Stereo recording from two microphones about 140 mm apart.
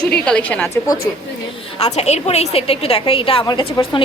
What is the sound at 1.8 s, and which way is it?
A woman's voice, 50° left (ahead or behind).